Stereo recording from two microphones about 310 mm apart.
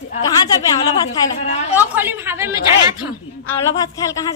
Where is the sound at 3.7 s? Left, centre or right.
Centre.